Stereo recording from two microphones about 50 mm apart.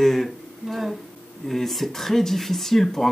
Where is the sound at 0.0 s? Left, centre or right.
Centre.